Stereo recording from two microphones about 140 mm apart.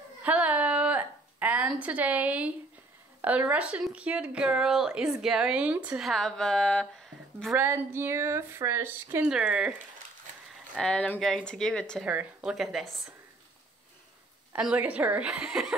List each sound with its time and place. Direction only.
0.2 s a sound: 10° right (ahead or behind)
3.2 s a woman's voice: 10° right (ahead or behind); by 6.9 s 5° left (ahead or behind)
7.5 s speech: 15° right (ahead or behind)
10.8 s a woman's voice: 10° left (ahead or behind)
12.0 s a woman's voice: 10° right (ahead or behind)
14.5 s speech: 10° right (ahead or behind)